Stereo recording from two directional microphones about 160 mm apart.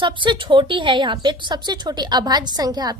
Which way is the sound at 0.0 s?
30° right (ahead or behind).